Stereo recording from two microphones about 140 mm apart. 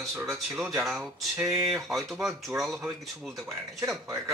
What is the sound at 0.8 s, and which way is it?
Speech, centre (ahead or behind).